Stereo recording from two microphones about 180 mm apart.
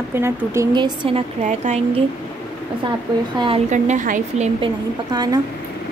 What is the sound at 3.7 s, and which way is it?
Speech, 40° right (ahead or behind).